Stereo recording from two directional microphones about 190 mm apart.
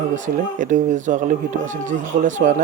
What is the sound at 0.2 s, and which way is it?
Speech, 40° right (ahead or behind).